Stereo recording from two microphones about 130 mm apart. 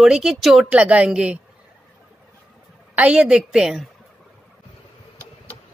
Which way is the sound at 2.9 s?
10° right (ahead or behind).